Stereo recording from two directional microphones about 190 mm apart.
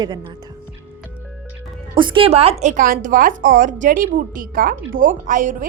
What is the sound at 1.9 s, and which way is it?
A woman's voice, 25° right (ahead or behind).